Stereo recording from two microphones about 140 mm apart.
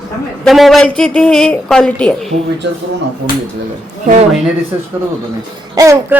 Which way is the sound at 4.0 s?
60° right (ahead or behind).